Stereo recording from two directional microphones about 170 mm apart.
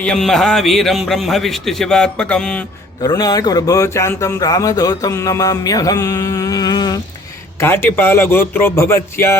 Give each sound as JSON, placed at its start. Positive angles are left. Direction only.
{"t": 0.0, "sound": "a man's voice", "side_deg": 5}
{"t": 3.0, "sound": "speech", "side_deg": 20}
{"t": 7.6, "sound": "speech", "side_deg": 15}